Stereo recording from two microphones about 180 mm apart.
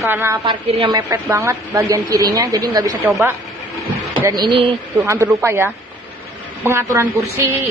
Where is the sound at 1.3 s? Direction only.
15° right (ahead or behind).